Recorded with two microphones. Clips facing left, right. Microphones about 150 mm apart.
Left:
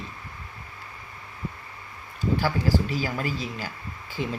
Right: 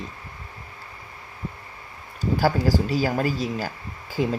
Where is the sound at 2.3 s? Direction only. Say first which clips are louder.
Right 3 dB; 40° right (ahead or behind).